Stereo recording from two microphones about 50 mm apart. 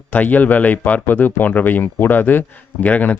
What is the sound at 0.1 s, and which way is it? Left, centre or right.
Speech, left.